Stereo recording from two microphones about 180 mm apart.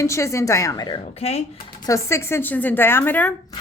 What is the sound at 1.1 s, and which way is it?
Speech, 35° left (ahead or behind).